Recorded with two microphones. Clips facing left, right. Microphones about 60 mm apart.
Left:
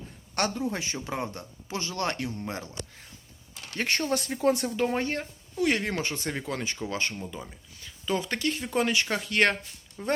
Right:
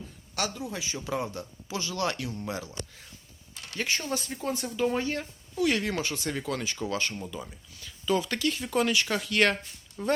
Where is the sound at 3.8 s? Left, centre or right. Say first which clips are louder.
Left 2 dB; left.